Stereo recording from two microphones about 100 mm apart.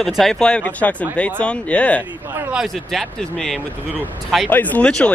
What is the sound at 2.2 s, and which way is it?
Speech, 20° right (ahead or behind).